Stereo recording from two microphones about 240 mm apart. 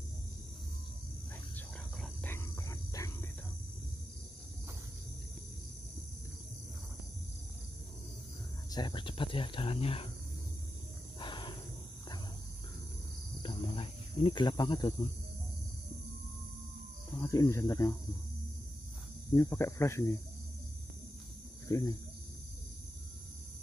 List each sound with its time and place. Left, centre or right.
2.0 s a sound: centre
8.6 s speech: centre
11.1 s a sound: centre
13.4 s cricket: left
17.2 s speech: centre
19.3 s speech: centre
21.6 s speech: centre